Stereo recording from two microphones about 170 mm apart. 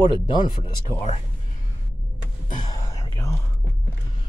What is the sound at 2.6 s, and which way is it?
Whispering, 20° left (ahead or behind).